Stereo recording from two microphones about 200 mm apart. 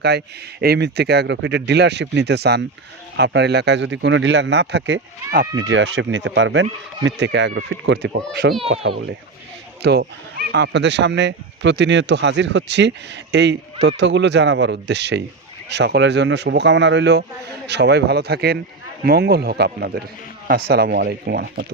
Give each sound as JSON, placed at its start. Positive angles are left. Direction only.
{"t": 0.6, "sound": "speech", "side_deg": -55}
{"t": 5.5, "sound": "speech", "side_deg": -65}
{"t": 8.8, "sound": "a child's voice", "side_deg": -30}
{"t": 9.8, "sound": "speech", "side_deg": -55}